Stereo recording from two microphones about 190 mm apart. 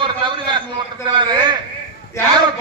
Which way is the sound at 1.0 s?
25° right (ahead or behind).